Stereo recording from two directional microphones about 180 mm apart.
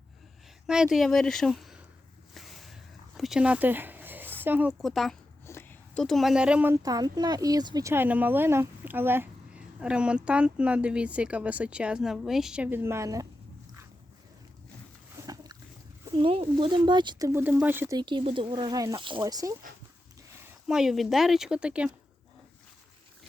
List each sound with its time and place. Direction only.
0.7 s a woman's voice: 5° right (ahead or behind)
2.3 s vehicle: centre (ahead or behind)
3.2 s a sound: 5° right (ahead or behind)
4.4 s speech: 10° right (ahead or behind)
4.8 s a woman's voice: centre (ahead or behind)
5.5 s a sound: 15° left (ahead or behind)
6.0 s a woman's voice: centre (ahead or behind)
6.8 s speech: 20° right (ahead or behind)
16.1 s speech: 30° right (ahead or behind); by 17.9 s 10° right (ahead or behind)
17.9 s speech: 25° right (ahead or behind)
20.7 s a woman's voice: centre (ahead or behind)